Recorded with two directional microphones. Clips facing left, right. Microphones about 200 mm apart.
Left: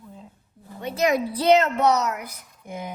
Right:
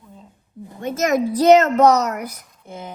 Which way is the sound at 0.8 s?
45° right (ahead or behind).